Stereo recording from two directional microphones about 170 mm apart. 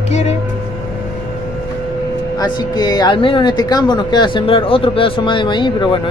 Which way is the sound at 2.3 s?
25° left (ahead or behind).